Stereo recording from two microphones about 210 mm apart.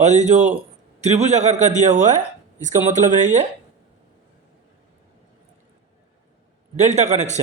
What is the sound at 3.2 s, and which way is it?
Speech, 35° right (ahead or behind).